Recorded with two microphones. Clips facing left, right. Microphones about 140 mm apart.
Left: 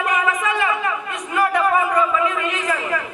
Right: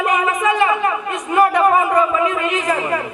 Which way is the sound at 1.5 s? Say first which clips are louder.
Right 4 dB; 45° right (ahead or behind).